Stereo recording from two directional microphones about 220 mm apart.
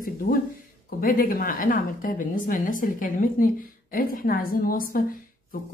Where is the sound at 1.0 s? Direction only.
40° left (ahead or behind).